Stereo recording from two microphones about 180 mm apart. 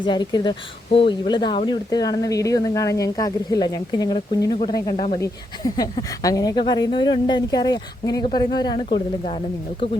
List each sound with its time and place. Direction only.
0.0 s speech: 25° left (ahead or behind)